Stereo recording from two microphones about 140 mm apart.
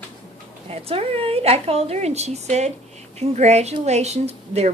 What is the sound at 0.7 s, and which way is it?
A woman's voice, 45° right (ahead or behind).